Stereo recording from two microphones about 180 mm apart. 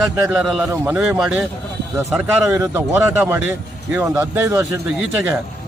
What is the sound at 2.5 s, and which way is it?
A man's voice, 10° right (ahead or behind).